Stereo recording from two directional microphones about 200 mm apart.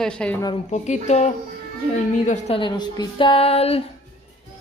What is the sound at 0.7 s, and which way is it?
A child's voice, 35° left (ahead or behind).